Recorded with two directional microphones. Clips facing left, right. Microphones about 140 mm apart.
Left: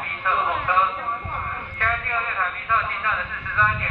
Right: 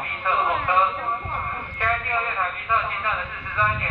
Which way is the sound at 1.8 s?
15° right (ahead or behind).